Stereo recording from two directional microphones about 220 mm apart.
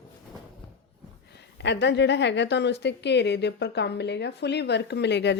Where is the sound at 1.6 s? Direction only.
50° left (ahead or behind).